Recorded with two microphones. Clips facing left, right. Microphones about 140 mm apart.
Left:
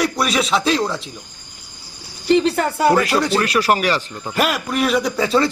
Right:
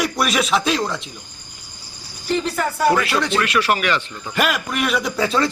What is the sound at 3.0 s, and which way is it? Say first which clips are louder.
Speech: left 3 dB; 40° left (ahead or behind).